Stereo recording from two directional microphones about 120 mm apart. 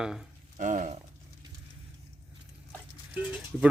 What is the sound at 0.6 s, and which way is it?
Speech, 90° right.